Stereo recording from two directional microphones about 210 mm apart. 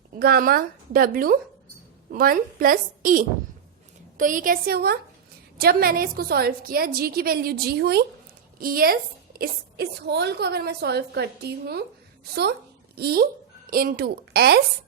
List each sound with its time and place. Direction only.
0.2 s a woman's voice: 45° right (ahead or behind)